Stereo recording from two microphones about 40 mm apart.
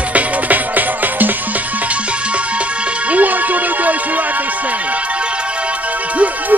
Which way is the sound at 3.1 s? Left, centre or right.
Right.